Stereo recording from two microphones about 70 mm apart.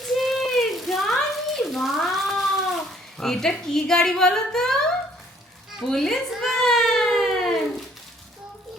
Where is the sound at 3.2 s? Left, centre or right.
Centre.